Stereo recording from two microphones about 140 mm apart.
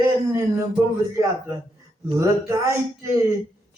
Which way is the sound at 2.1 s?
20° right (ahead or behind).